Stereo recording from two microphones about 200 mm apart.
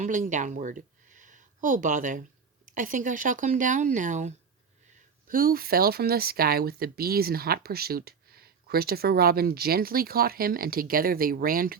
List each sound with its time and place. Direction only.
0.0 s speech: 40° right (ahead or behind)